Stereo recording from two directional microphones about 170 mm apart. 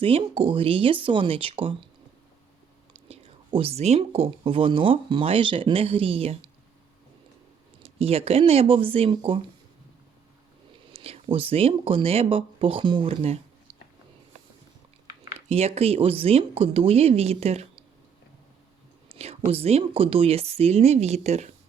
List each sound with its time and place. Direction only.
0.0 s speech: 35° right (ahead or behind)
3.1 s speech: 35° right (ahead or behind)
7.8 s speech: 35° right (ahead or behind)
10.9 s speech: 35° right (ahead or behind)
15.4 s speech: 40° right (ahead or behind)
19.1 s speech: 35° right (ahead or behind)